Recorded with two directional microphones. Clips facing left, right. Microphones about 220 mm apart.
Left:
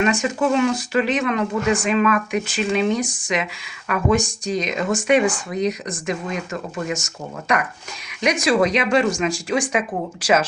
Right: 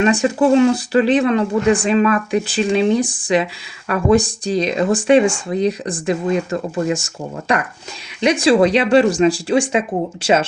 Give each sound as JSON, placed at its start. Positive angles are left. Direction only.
{"t": 0.0, "sound": "speech", "side_deg": -35}